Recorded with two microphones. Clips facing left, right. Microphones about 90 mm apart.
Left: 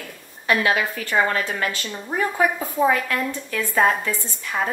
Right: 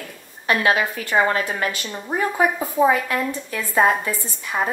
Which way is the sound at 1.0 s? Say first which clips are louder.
Right 2 dB; 20° right (ahead or behind).